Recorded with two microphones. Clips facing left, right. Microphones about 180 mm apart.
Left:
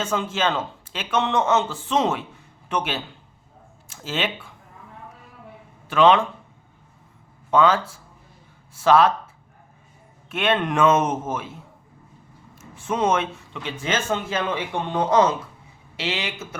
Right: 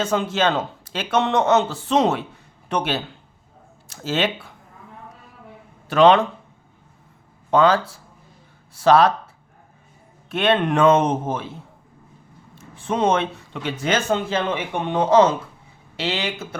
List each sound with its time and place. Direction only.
0.0 s a man's voice: 35° right (ahead or behind)
5.9 s a man's voice: 40° right (ahead or behind)
7.5 s a man's voice: 35° right (ahead or behind)
10.2 s a man's voice: 35° right (ahead or behind)